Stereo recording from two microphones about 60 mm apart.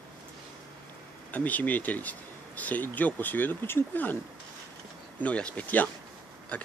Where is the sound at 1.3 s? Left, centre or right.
Left.